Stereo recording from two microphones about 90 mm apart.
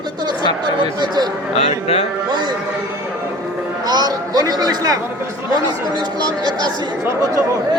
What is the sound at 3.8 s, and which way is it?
Speech, 50° right (ahead or behind).